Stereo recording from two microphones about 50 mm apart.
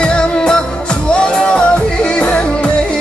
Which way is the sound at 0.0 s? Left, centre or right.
Centre.